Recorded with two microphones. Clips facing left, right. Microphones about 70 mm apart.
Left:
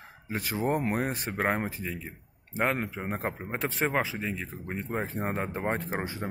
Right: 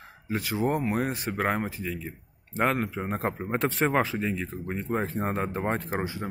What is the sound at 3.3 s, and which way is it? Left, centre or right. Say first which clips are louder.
Speech: right 7 dB; centre.